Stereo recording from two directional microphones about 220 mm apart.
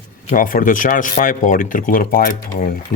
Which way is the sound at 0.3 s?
40° left (ahead or behind).